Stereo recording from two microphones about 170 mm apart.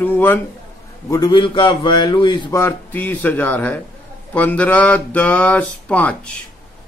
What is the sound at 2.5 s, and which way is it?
A man's voice, 15° left (ahead or behind).